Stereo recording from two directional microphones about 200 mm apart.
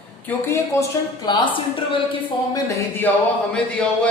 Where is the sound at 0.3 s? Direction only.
10° left (ahead or behind).